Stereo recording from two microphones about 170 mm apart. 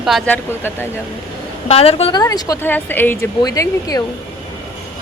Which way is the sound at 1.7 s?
35° left (ahead or behind).